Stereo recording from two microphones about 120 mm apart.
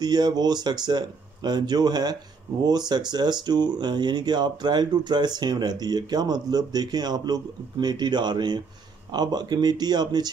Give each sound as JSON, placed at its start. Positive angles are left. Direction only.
{"t": 0.0, "sound": "speech", "side_deg": -35}